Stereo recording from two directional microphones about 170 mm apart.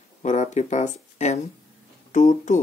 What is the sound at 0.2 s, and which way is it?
Speech, 45° left (ahead or behind).